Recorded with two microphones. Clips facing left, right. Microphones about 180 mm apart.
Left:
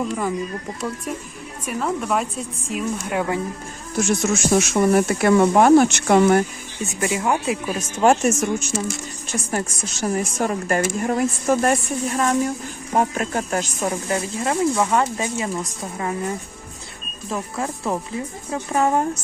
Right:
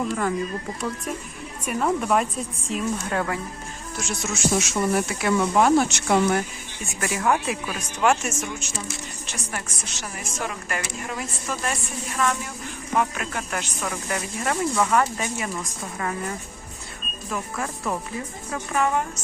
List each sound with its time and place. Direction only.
0.1 s a woman's voice: 10° left (ahead or behind)
1.6 s speech: centre (ahead or behind)
2.7 s a woman's voice: 15° left (ahead or behind)
3.9 s speech: 50° left (ahead or behind)
7.0 s speech: 20° left (ahead or behind)